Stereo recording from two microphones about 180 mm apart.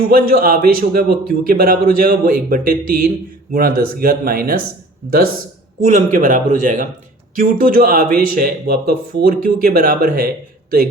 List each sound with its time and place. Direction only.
0.0 s speech: 55° right (ahead or behind)